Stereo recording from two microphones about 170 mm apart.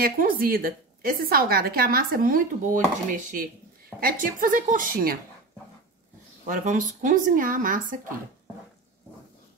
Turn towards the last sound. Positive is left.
turn(degrees=-50)  # may be behind; listen again after turning